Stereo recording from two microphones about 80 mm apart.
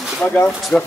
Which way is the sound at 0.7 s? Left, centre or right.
Centre.